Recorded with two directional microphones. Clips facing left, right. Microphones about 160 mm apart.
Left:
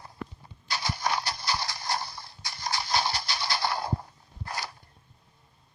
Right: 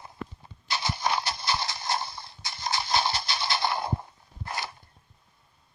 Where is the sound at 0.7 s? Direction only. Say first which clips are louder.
Right 1 dB; 25° right (ahead or behind).